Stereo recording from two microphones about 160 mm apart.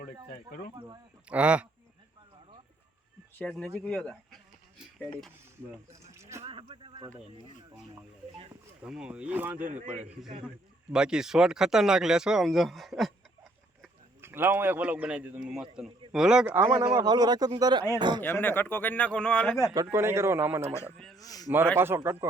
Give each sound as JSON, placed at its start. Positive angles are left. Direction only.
{"t": 1.3, "sound": "speech", "side_deg": -5}
{"t": 3.3, "sound": "speech", "side_deg": 5}
{"t": 5.9, "sound": "a sound", "side_deg": -20}
{"t": 6.4, "sound": "a sound", "side_deg": -35}
{"t": 8.8, "sound": "speech", "side_deg": -5}
{"t": 9.8, "sound": "a man's voice", "side_deg": -45}
{"t": 10.9, "sound": "speech", "side_deg": -5}
{"t": 14.2, "sound": "speech", "side_deg": -15}
{"t": 16.8, "sound": "speech", "side_deg": -25}
{"t": 18.2, "sound": "speech", "side_deg": 10}
{"t": 19.7, "sound": "speech", "side_deg": -20}
{"t": 21.2, "sound": "a man's voice", "side_deg": 25}
{"t": 21.8, "sound": "speech", "side_deg": -15}